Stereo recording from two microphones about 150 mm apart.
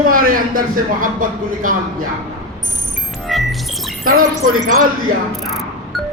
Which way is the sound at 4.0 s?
75° right (ahead or behind).